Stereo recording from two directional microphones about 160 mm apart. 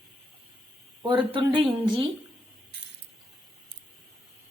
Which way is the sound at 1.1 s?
30° right (ahead or behind).